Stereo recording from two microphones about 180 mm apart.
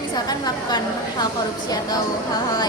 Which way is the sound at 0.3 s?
20° left (ahead or behind).